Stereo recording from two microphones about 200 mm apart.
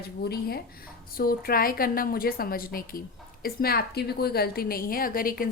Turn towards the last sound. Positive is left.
turn(degrees=45)  # may be behind; listen again after turning